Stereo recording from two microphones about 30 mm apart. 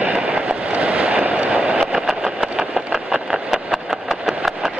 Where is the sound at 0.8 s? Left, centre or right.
Right.